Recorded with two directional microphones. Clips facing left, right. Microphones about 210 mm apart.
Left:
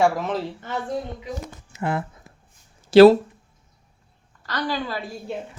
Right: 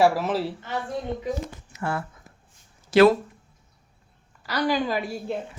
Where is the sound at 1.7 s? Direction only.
20° left (ahead or behind).